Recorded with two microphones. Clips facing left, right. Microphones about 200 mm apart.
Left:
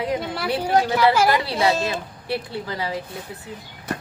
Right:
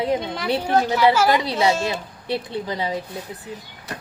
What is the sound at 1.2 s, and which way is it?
Speech, 20° right (ahead or behind).